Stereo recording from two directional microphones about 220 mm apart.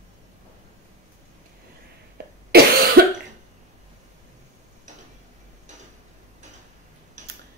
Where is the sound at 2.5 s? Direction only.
45° right (ahead or behind).